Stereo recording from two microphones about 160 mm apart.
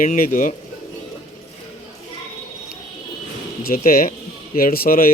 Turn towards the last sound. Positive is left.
turn(degrees=65)  # may be behind; listen again after turning